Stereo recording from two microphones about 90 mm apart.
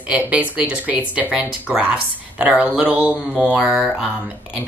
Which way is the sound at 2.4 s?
10° right (ahead or behind).